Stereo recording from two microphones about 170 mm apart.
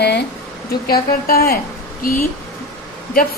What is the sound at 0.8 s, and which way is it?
A woman's voice, 60° left (ahead or behind).